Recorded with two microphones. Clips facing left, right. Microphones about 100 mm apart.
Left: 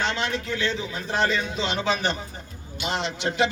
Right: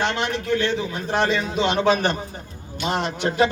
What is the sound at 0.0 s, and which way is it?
A man's voice, 55° right (ahead or behind).